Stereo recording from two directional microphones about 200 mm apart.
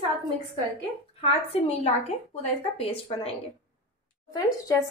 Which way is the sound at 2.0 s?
30° left (ahead or behind).